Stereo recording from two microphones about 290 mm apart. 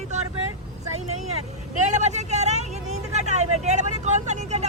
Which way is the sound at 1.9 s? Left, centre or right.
Right.